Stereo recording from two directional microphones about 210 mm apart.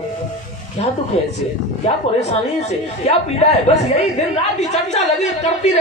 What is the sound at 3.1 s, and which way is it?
A woman's voice, 30° left (ahead or behind).